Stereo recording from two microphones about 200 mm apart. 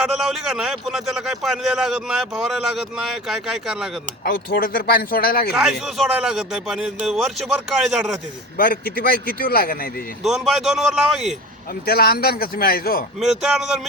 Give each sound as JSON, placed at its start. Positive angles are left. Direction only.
{"t": 0.0, "sound": "a man's voice", "side_deg": 0}
{"t": 4.2, "sound": "speech", "side_deg": 45}
{"t": 5.8, "sound": "a man's voice", "side_deg": 0}
{"t": 8.5, "sound": "speech", "side_deg": 45}
{"t": 10.2, "sound": "a man's voice", "side_deg": 0}
{"t": 11.9, "sound": "speech", "side_deg": 50}
{"t": 13.1, "sound": "a man's voice", "side_deg": 0}